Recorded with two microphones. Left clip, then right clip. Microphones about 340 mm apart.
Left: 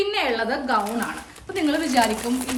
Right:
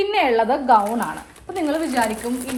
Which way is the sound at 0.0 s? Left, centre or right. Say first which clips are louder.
Right 5 dB; centre.